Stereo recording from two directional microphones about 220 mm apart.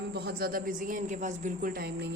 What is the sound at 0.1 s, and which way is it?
Speech, 45° right (ahead or behind).